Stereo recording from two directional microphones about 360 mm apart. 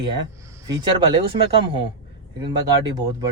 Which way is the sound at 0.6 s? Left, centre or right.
Centre.